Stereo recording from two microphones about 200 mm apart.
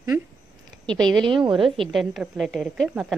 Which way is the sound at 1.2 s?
25° right (ahead or behind).